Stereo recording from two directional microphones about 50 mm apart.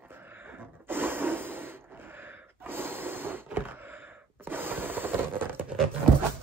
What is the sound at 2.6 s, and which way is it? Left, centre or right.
Gasp, right.